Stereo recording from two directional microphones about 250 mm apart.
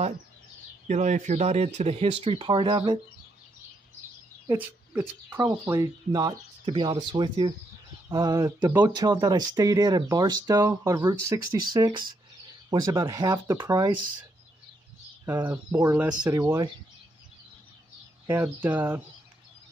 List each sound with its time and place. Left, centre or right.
0.8 s speech: right
4.5 s speech: centre
15.2 s speech: centre
18.2 s speech: centre